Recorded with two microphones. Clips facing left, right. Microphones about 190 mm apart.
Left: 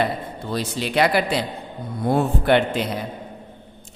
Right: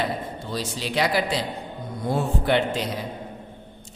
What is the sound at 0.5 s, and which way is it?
A man's voice, 60° left (ahead or behind).